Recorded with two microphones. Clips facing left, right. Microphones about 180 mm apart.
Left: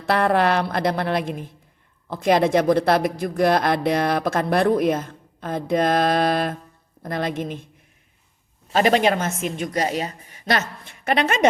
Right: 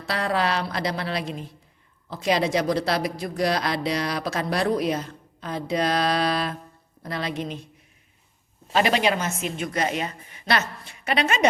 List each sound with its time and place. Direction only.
0.0 s speech: 55° left (ahead or behind)
8.7 s speech: 45° left (ahead or behind)